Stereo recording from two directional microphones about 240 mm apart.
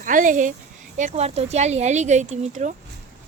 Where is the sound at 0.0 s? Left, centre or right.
Right.